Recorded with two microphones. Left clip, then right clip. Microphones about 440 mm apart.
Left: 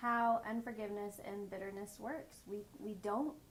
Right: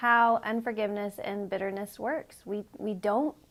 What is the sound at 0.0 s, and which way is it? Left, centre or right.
A woman's voice, right.